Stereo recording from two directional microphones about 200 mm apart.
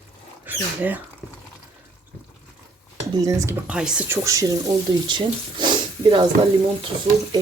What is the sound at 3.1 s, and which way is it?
Speech, 15° right (ahead or behind).